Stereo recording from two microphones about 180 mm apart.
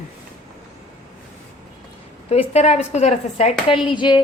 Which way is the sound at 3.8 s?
25° left (ahead or behind).